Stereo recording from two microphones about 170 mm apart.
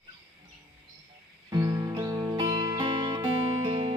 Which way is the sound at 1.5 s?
20° right (ahead or behind).